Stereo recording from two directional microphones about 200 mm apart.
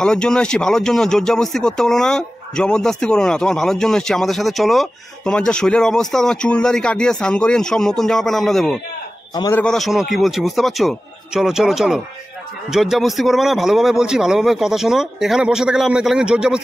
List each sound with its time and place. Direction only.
0.0 s speech: 5° left (ahead or behind)
9.3 s a man's voice: 20° left (ahead or behind)
9.6 s speech: centre (ahead or behind)